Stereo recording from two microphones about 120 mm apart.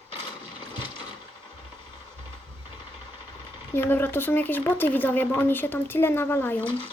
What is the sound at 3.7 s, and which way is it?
Speech, 20° left (ahead or behind).